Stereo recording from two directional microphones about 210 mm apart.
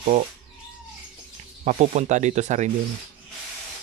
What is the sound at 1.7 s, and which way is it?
A man's voice, 35° right (ahead or behind).